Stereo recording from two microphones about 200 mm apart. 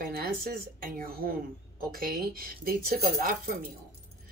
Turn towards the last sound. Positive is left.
turn(degrees=-45)  # may be behind; listen again after turning